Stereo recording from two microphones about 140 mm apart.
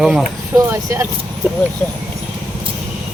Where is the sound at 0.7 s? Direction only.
20° right (ahead or behind).